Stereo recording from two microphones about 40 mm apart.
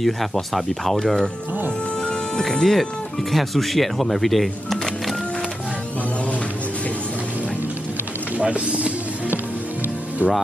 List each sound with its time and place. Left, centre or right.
0.0 s speech: centre
2.5 s speech: centre
8.4 s speech: right
10.2 s speech: right